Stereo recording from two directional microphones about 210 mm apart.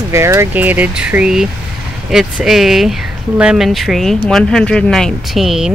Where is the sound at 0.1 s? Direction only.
15° right (ahead or behind).